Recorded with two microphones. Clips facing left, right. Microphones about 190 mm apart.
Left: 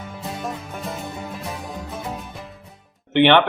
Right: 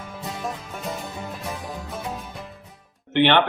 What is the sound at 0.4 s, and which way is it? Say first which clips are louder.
Music: even; centre (ahead or behind).